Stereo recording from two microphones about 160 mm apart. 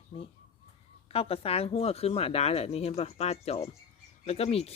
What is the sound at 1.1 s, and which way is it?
Speech, 40° left (ahead or behind).